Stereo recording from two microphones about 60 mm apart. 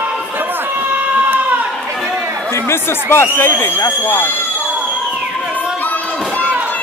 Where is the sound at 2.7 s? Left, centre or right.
Left.